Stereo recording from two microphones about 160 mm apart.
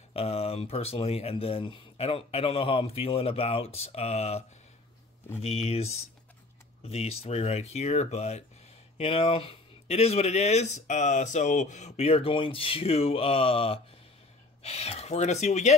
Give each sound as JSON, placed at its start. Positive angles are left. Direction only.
{"t": 0.1, "sound": "speech", "side_deg": 40}